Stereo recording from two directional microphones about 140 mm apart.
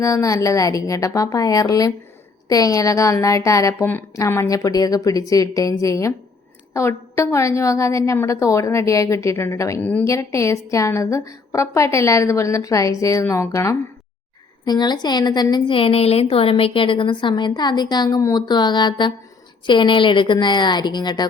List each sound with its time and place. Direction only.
0.0 s a woman's voice: 25° left (ahead or behind)